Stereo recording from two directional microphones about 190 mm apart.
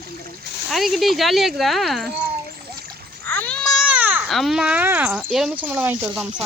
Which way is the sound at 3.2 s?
10° left (ahead or behind).